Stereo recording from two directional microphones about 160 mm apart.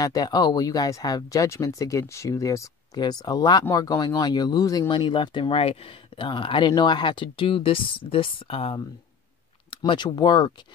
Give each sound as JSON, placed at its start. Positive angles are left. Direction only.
{"t": 0.0, "sound": "speech", "side_deg": 25}